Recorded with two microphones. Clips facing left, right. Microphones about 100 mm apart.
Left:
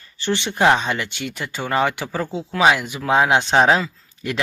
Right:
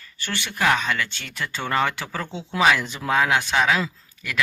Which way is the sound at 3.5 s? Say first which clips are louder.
Left 7 dB; 35° left (ahead or behind).